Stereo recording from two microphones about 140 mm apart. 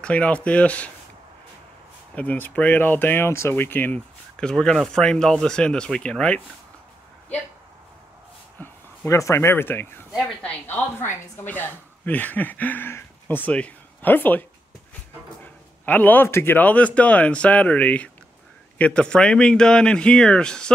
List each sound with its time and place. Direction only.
0.0 s speech: 10° left (ahead or behind)
2.1 s speech: 10° left (ahead or behind)
8.5 s speech: 20° left (ahead or behind)
15.8 s speech: 10° left (ahead or behind)